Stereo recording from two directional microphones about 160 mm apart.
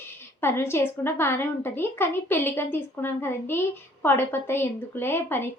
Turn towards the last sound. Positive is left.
turn(degrees=15)  # may be behind; listen again after turning